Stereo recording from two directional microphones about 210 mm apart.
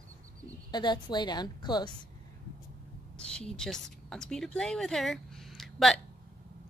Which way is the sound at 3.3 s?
5° left (ahead or behind).